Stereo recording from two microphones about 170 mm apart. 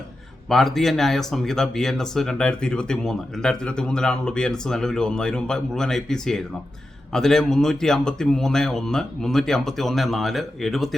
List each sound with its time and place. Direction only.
0.4 s speech: centre (ahead or behind)